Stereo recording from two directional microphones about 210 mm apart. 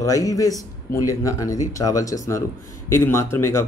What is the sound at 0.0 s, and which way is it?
Speech, 15° left (ahead or behind).